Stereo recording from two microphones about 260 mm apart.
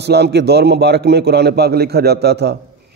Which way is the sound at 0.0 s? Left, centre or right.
Right.